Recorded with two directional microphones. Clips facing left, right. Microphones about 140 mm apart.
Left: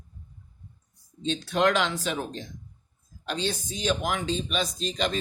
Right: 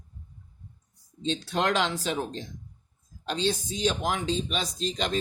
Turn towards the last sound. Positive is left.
turn(degrees=-30)  # may be behind; listen again after turning